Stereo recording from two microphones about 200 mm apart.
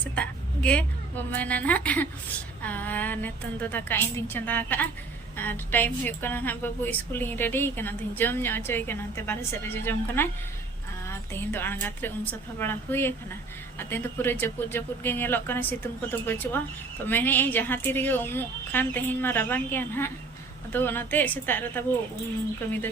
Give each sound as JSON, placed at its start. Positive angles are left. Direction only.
{"t": 0.0, "sound": "a woman's voice", "side_deg": 5}